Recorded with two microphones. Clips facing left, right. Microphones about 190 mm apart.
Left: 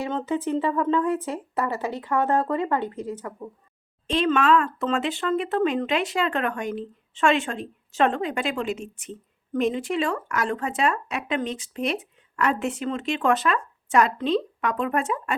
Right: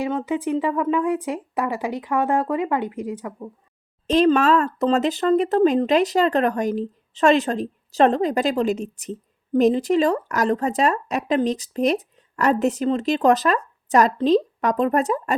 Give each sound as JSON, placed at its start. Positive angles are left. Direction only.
{"t": 0.0, "sound": "speech", "side_deg": -10}
{"t": 4.0, "sound": "speech", "side_deg": -40}